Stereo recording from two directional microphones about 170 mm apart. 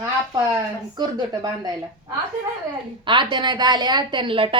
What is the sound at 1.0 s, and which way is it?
Speech, 25° right (ahead or behind).